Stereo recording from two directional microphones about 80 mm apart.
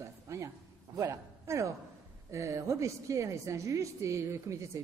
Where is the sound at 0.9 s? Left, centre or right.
Right.